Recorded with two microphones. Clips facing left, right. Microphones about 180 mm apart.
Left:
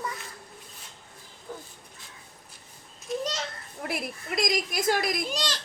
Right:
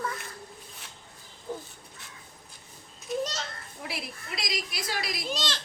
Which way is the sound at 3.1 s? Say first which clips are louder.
Right 1 dB; centre (ahead or behind).